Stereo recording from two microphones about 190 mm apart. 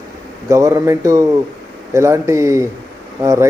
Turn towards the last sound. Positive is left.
turn(degrees=-15)  # may be behind; listen again after turning